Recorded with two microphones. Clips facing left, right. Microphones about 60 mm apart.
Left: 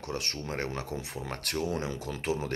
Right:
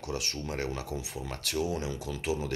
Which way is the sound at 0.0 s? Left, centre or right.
Left.